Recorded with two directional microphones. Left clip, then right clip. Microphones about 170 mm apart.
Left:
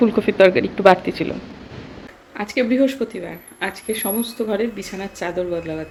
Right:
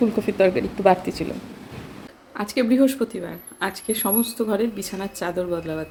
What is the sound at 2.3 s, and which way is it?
Speech, 15° right (ahead or behind).